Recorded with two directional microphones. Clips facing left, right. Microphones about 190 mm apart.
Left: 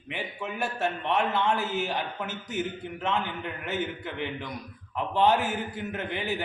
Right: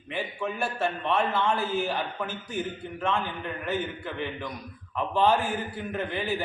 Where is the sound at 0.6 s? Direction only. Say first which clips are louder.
Left 1 dB; 20° left (ahead or behind).